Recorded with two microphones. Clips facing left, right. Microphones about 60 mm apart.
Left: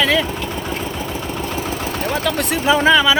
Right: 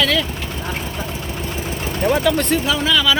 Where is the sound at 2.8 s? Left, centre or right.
Left.